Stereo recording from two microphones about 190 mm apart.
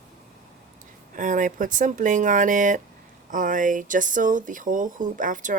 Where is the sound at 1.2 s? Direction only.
45° right (ahead or behind).